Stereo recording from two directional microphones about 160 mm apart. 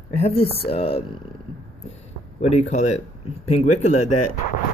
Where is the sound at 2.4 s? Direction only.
45° left (ahead or behind).